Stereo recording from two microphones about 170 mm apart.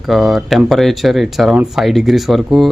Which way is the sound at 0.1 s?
Centre (ahead or behind).